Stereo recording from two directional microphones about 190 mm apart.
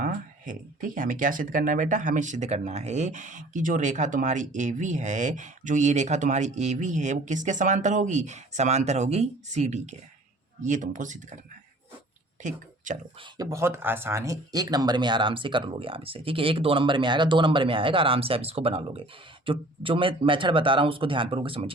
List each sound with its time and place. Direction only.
0.0 s speech: 45° right (ahead or behind)
12.4 s a sound: 40° right (ahead or behind)
13.3 s speech: 15° right (ahead or behind)